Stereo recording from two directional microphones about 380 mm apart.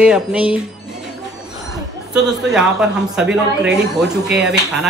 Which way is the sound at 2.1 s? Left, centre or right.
Centre.